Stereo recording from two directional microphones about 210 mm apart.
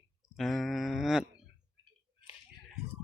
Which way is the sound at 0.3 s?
Centre (ahead or behind).